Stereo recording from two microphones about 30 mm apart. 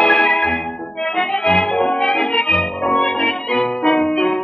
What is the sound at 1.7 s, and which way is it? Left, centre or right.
Music, left.